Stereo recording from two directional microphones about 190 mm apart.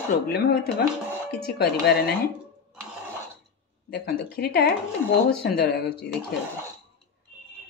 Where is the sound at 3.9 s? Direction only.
55° left (ahead or behind).